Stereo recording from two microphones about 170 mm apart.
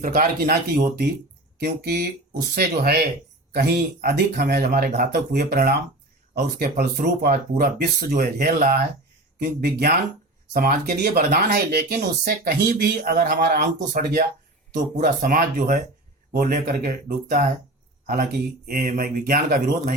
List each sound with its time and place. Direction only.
0.0 s speech: 55° right (ahead or behind)
1.5 s speech: 70° right (ahead or behind)